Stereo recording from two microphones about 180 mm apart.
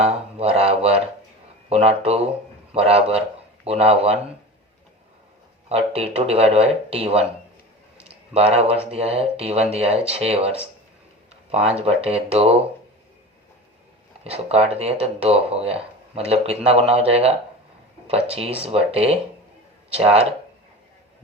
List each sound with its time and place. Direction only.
0.0 s speech: 35° right (ahead or behind)
5.6 s speech: 35° right (ahead or behind)
8.0 s a sound: 35° right (ahead or behind)
8.9 s speech: 35° right (ahead or behind)
14.3 s speech: 35° right (ahead or behind)
19.9 s speech: 35° right (ahead or behind)